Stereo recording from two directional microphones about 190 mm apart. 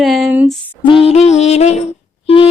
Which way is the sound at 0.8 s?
30° left (ahead or behind).